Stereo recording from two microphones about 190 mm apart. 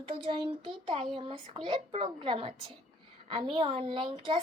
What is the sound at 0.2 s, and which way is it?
A child's voice, 30° right (ahead or behind).